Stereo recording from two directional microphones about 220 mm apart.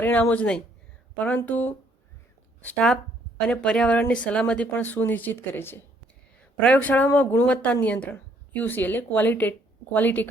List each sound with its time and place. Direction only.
0.0 s speech: 10° left (ahead or behind)